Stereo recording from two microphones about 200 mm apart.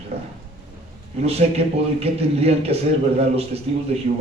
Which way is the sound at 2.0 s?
30° right (ahead or behind).